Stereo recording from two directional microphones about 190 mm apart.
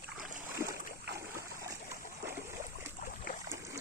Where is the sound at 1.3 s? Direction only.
15° right (ahead or behind).